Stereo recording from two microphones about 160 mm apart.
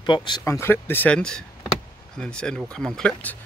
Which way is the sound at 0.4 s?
15° left (ahead or behind).